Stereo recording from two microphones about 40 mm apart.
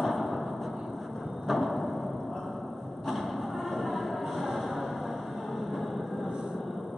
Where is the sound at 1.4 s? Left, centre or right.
Centre.